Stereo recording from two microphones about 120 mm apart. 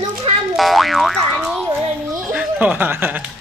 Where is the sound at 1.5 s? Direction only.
20° right (ahead or behind).